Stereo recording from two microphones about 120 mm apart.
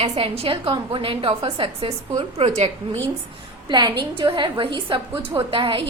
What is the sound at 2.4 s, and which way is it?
Speech, 65° right (ahead or behind).